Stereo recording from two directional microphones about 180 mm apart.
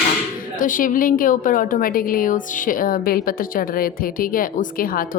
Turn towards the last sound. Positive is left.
turn(degrees=50)  # may be behind; listen again after turning